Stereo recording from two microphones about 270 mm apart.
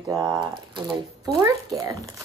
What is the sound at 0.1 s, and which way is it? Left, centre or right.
Speech, centre.